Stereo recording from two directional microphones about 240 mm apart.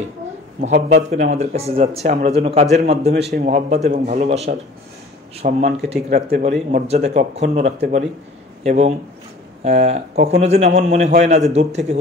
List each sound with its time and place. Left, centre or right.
0.6 s speech: right